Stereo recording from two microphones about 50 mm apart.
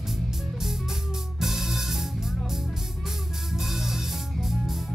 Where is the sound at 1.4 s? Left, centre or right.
Centre.